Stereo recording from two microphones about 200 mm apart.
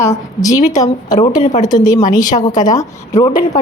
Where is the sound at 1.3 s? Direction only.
35° left (ahead or behind).